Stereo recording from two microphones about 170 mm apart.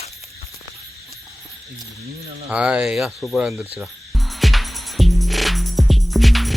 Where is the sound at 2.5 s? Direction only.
5° right (ahead or behind).